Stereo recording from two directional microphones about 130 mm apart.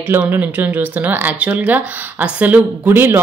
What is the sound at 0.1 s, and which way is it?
A woman's voice, 15° right (ahead or behind).